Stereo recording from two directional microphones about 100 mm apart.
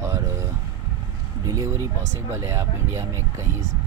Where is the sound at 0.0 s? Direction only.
30° right (ahead or behind).